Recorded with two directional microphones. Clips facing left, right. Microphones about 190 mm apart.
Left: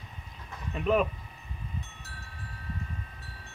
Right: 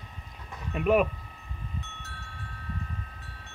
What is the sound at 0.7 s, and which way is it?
Speech, 10° right (ahead or behind).